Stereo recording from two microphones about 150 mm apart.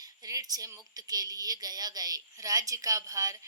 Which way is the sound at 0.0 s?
25° right (ahead or behind).